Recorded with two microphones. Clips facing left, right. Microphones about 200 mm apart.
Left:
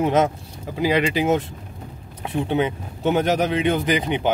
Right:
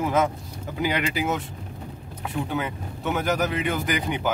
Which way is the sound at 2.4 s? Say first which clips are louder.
Left 7 dB; 30° left (ahead or behind).